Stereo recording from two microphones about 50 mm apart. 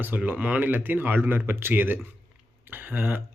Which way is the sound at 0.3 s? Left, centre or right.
Right.